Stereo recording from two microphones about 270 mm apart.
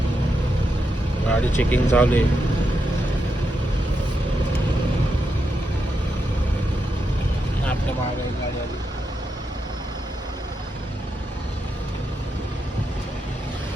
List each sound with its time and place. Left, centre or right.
1.3 s speech: centre